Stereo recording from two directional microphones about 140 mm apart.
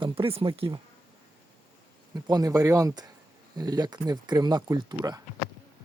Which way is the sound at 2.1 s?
25° right (ahead or behind).